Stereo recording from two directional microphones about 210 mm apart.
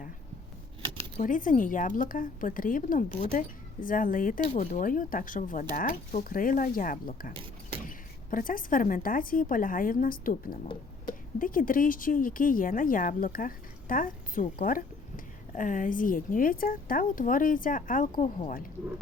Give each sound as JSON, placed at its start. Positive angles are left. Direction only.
{"t": 1.2, "sound": "speech", "side_deg": 40}